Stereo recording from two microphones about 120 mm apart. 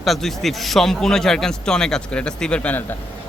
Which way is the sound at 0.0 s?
Centre (ahead or behind).